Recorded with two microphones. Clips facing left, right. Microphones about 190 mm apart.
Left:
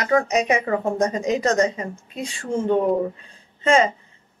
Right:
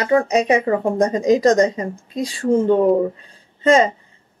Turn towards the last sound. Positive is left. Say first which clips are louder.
# right 4 dB
turn(degrees=-35)  # may be behind; listen again after turning